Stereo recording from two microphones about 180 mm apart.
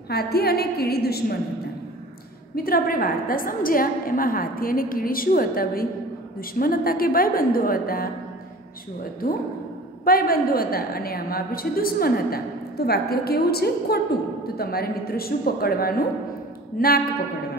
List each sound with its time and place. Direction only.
0.1 s a woman's voice: 60° left (ahead or behind)
2.5 s a woman's voice: 55° left (ahead or behind)
10.0 s a woman's voice: 55° left (ahead or behind)